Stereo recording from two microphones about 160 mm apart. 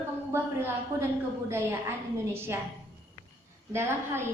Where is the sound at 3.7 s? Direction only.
15° right (ahead or behind).